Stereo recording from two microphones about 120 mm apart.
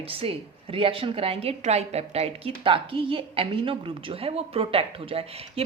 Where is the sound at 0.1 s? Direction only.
50° right (ahead or behind).